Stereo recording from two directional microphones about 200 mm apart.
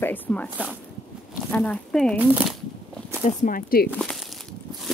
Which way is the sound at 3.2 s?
40° left (ahead or behind).